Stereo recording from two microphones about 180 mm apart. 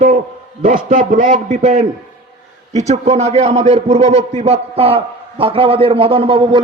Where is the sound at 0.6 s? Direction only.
50° right (ahead or behind).